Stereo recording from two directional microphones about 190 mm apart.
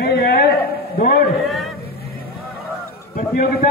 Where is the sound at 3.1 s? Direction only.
50° left (ahead or behind).